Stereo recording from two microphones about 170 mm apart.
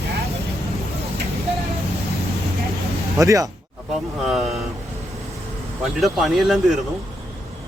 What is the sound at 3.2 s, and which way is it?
Speech, 20° right (ahead or behind).